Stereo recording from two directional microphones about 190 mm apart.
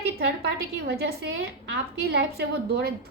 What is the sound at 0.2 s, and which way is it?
A woman's voice, 60° right (ahead or behind).